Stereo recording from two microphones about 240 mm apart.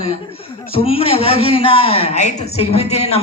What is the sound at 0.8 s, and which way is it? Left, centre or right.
A man's voice, left.